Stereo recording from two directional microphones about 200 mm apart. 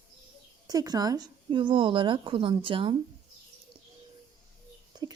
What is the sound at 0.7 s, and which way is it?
A woman's voice, 20° right (ahead or behind).